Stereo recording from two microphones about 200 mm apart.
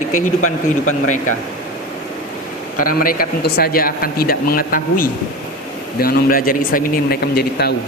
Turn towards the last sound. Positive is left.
turn(degrees=50)  # may be behind; listen again after turning